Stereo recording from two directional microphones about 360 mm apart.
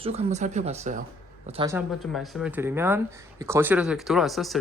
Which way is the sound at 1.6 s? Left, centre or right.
Centre.